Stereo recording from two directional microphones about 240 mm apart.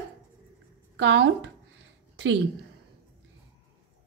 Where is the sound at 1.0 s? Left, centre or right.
Right.